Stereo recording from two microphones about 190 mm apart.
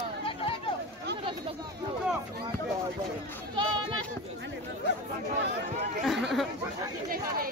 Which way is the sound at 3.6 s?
25° right (ahead or behind).